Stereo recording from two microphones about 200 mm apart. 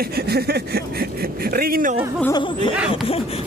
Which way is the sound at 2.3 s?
25° left (ahead or behind).